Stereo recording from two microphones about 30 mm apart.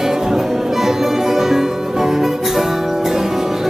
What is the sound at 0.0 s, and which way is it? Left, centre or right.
Music, centre.